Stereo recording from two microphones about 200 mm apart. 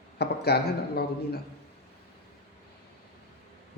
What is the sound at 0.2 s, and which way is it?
Speech, 55° left (ahead or behind).